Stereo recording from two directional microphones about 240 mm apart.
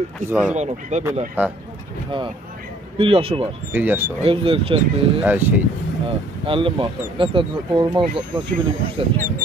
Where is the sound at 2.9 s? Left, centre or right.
Right.